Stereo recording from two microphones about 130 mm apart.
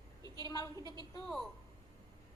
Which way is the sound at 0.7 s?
30° right (ahead or behind).